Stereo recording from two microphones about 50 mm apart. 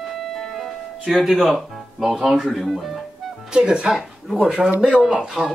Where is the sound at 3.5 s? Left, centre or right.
Centre.